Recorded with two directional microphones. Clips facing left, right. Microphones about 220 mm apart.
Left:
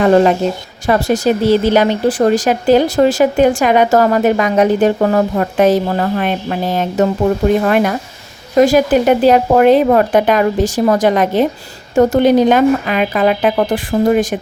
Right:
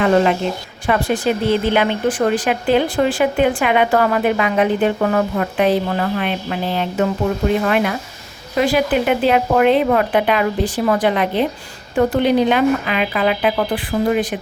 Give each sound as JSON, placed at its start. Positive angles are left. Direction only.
{"t": 0.0, "sound": "speech", "side_deg": 40}